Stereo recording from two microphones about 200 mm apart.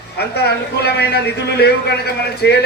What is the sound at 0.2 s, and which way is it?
Speech, 55° left (ahead or behind).